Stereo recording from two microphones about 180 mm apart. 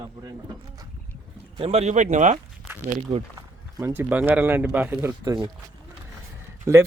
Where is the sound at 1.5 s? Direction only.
35° right (ahead or behind).